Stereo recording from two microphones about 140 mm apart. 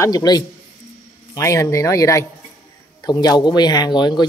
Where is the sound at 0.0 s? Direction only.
30° left (ahead or behind).